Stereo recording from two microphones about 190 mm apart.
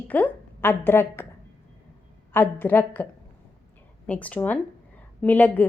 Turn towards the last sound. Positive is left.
turn(degrees=10)  # may be behind; listen again after turning